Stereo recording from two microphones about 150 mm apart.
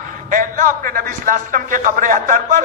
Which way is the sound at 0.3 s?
60° right (ahead or behind).